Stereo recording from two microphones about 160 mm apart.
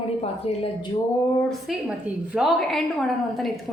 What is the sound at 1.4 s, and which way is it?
A woman's voice, centre (ahead or behind).